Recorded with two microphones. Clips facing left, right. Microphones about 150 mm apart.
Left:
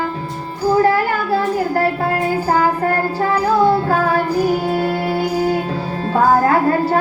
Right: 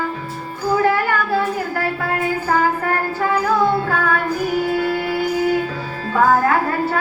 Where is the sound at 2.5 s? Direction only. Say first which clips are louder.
Left 2 dB; 35° left (ahead or behind).